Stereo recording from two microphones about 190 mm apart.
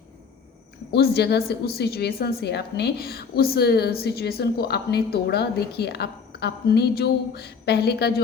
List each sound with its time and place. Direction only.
0.9 s a woman's voice: 60° left (ahead or behind)